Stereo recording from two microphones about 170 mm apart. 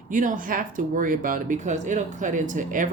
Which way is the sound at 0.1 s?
50° right (ahead or behind).